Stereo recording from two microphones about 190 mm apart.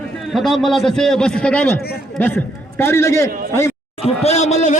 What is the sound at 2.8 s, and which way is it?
Speech, 15° left (ahead or behind).